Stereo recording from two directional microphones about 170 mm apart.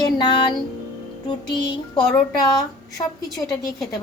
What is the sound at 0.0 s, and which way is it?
Music, 30° left (ahead or behind).